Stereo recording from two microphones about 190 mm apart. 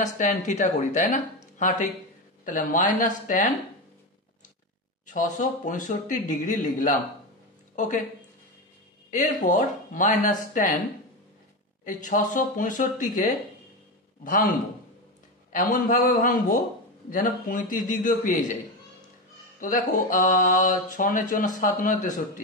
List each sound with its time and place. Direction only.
0.0 s speech: 40° left (ahead or behind)
5.0 s speech: 45° left (ahead or behind)
9.1 s speech: 45° left (ahead or behind)
11.8 s speech: 40° left (ahead or behind)
14.2 s speech: 45° left (ahead or behind)
15.5 s speech: 50° left (ahead or behind)
19.6 s speech: 45° left (ahead or behind)